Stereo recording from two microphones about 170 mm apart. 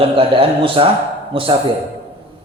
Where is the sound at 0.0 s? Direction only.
35° right (ahead or behind).